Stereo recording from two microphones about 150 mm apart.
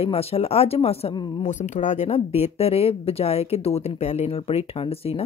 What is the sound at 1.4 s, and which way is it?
Speech, 55° left (ahead or behind).